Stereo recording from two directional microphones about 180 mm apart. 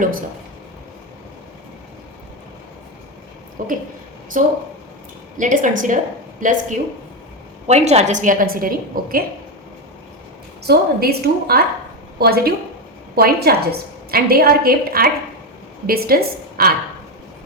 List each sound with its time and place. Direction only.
3.6 s a woman's voice: 50° right (ahead or behind)
10.6 s a woman's voice: 60° right (ahead or behind)